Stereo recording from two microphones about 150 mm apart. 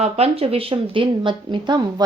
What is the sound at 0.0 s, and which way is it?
Speech, 40° right (ahead or behind).